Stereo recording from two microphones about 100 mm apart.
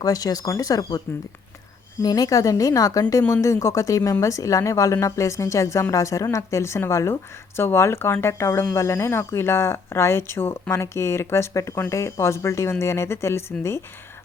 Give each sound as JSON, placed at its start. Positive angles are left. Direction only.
{"t": 0.0, "sound": "speech", "side_deg": 35}